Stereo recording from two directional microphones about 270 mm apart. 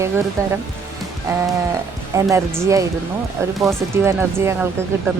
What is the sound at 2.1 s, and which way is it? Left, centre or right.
Speech, centre.